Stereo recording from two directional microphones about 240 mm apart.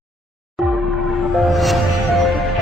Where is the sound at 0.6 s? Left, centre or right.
Centre.